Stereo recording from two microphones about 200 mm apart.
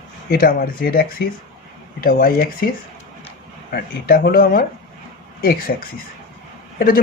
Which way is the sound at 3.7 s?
50° left (ahead or behind).